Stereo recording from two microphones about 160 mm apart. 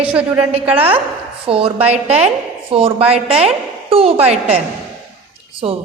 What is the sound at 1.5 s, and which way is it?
A woman's voice, 35° right (ahead or behind).